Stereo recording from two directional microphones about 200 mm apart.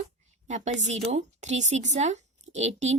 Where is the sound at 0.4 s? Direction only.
35° right (ahead or behind).